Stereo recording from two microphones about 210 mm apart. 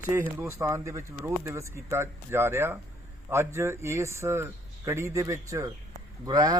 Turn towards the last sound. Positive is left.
turn(degrees=-20)  # may be behind; listen again after turning